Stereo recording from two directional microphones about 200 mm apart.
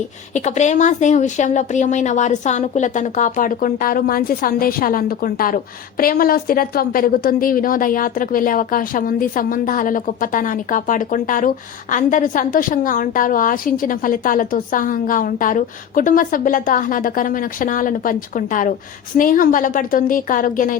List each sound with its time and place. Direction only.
0.3 s a woman's voice: 35° left (ahead or behind)